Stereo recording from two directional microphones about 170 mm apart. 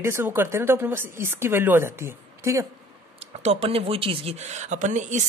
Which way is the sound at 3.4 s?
35° right (ahead or behind).